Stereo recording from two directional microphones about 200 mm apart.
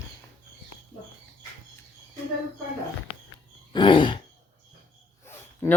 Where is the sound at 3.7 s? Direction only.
25° left (ahead or behind).